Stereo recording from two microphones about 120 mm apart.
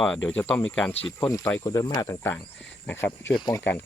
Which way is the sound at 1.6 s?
35° left (ahead or behind).